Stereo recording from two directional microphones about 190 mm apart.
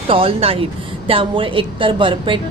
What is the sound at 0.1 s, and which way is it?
A woman's voice, 30° right (ahead or behind).